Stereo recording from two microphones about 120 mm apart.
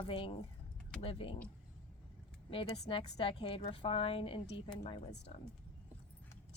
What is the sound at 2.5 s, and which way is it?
A woman's voice, 50° left (ahead or behind).